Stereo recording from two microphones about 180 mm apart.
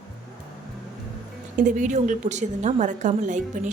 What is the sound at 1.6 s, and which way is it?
A woman's voice, 45° right (ahead or behind).